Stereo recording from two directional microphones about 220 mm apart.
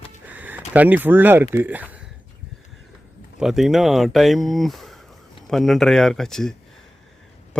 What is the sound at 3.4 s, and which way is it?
Speech, centre (ahead or behind).